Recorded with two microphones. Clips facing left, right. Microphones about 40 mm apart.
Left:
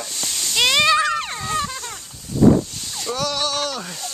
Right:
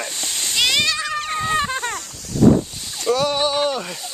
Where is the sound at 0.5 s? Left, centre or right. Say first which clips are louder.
Left 2 dB; centre.